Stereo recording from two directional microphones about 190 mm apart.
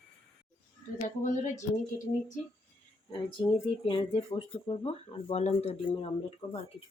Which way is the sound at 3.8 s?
25° left (ahead or behind).